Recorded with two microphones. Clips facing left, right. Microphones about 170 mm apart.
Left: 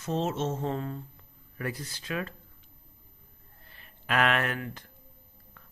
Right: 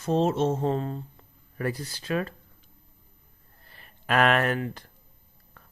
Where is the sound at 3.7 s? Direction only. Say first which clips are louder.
Right 4 dB; 45° right (ahead or behind).